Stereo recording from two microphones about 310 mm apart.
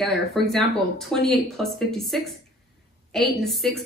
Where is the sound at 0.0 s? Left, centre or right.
Centre.